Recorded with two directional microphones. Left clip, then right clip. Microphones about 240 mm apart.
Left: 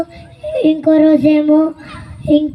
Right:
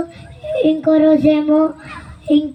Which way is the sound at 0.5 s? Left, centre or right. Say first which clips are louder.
Left 2 dB; left.